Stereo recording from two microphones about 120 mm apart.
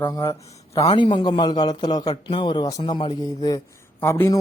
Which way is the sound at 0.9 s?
40° left (ahead or behind).